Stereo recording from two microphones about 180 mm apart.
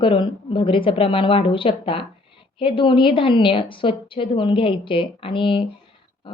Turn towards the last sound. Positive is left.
turn(degrees=25)  # may be behind; listen again after turning